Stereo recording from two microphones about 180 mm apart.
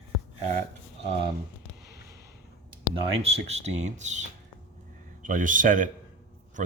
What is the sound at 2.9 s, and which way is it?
A man's voice, 30° right (ahead or behind).